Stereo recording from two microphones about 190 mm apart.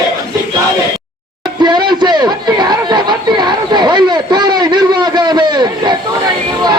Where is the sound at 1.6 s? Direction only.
25° right (ahead or behind).